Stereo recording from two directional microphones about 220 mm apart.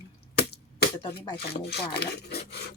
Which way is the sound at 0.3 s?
45° left (ahead or behind).